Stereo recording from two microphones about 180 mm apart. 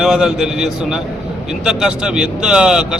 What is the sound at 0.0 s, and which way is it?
Speech, 5° right (ahead or behind).